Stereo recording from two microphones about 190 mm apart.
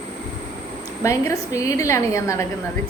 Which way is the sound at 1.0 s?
15° left (ahead or behind).